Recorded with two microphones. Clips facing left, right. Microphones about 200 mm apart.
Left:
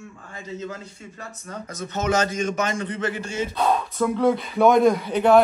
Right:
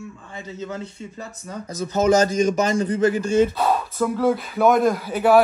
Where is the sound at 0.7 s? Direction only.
30° right (ahead or behind).